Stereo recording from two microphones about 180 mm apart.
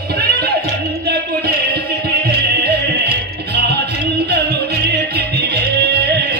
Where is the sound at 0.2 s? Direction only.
60° right (ahead or behind).